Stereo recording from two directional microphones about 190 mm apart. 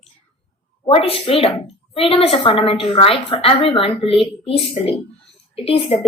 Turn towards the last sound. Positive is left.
turn(degrees=30)  # may be behind; listen again after turning